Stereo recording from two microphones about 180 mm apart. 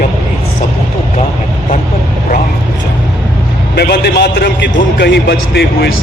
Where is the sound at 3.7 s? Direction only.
60° left (ahead or behind).